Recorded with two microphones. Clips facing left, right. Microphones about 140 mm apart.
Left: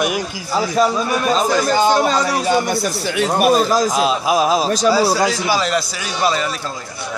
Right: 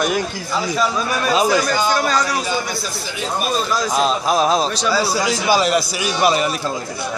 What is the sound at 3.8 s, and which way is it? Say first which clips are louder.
Speech: left 1 dB; 5° left (ahead or behind).